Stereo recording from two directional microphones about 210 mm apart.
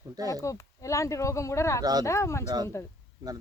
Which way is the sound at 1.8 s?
20° right (ahead or behind).